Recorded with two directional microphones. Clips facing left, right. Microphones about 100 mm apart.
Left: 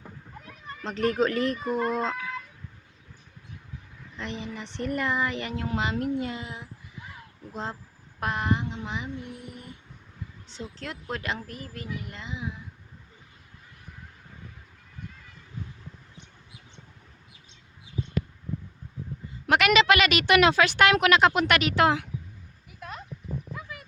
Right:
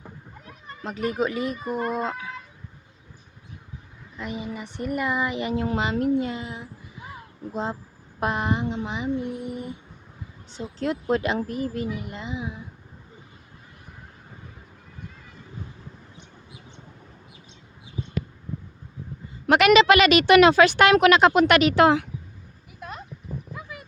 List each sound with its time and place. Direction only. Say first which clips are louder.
0.9 s speech: left 1 dB; 10° right (ahead or behind)
4.2 s speech: right 3 dB; 10° right (ahead or behind)
5.6 s a woman's voice: right 3 dB; 30° right (ahead or behind)
19.5 s a woman's voice: right 5 dB; 25° right (ahead or behind)
22.8 s a sound: right 2 dB; 15° right (ahead or behind)
23.6 s dog: right 2 dB; 20° right (ahead or behind)